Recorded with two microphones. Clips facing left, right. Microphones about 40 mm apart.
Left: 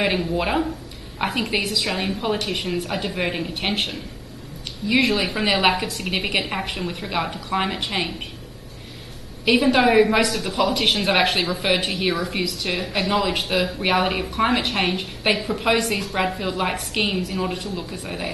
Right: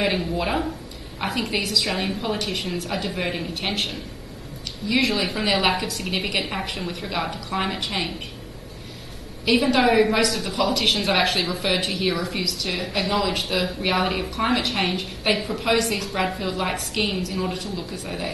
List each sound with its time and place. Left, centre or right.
0.0 s a woman's voice: centre
4.8 s speech: centre
9.4 s speech: centre
10.7 s speech: centre